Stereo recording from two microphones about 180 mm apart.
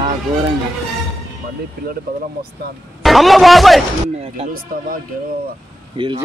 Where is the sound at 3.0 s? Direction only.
Centre (ahead or behind).